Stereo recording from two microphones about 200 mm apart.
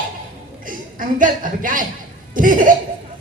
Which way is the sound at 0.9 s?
40° right (ahead or behind).